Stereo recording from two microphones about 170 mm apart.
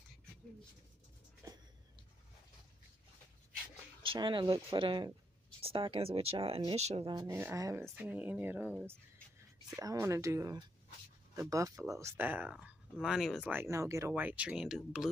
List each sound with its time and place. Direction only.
4.0 s speech: 30° right (ahead or behind)
7.1 s speech: 20° right (ahead or behind)
9.8 s speech: 20° right (ahead or behind); by 13.5 s centre (ahead or behind)
13.5 s speech: 15° right (ahead or behind)